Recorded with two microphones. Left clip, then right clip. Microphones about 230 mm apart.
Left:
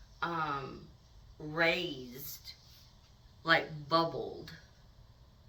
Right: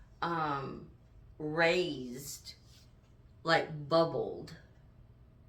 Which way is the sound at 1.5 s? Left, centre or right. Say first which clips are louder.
Right 1 dB; centre.